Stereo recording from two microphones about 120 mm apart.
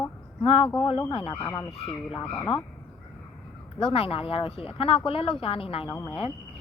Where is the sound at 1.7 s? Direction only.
55° left (ahead or behind).